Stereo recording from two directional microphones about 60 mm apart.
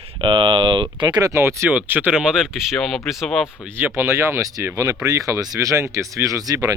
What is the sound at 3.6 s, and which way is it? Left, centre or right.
Speech, right.